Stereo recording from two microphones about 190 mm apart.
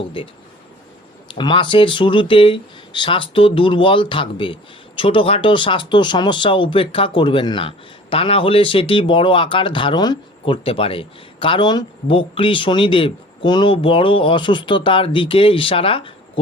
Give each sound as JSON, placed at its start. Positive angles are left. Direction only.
{"t": 1.3, "sound": "speech", "side_deg": 25}